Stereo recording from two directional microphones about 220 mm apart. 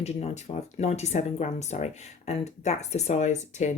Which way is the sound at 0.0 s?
30° left (ahead or behind).